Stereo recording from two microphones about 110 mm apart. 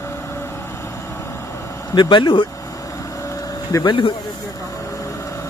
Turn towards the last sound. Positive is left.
turn(degrees=40)  # may be behind; listen again after turning